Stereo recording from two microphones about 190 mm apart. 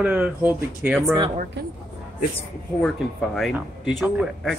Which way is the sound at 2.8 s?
Centre (ahead or behind).